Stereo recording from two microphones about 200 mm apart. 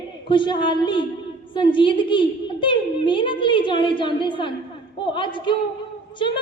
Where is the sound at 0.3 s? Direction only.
25° left (ahead or behind).